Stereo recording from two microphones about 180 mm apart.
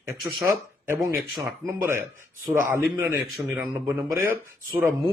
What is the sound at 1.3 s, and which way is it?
Speech, centre (ahead or behind).